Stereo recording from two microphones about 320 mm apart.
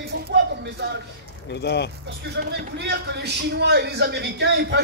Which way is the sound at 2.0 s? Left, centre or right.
Right.